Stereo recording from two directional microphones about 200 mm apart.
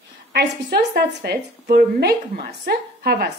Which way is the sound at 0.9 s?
55° right (ahead or behind).